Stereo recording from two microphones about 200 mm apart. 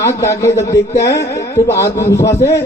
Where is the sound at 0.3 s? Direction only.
15° left (ahead or behind).